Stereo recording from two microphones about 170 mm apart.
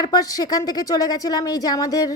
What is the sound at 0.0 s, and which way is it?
A woman's voice, 20° left (ahead or behind).